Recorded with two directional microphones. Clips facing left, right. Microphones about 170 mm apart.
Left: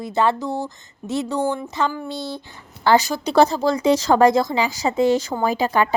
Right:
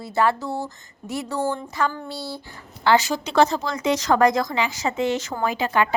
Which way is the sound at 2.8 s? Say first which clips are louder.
Left 2 dB; 40° left (ahead or behind).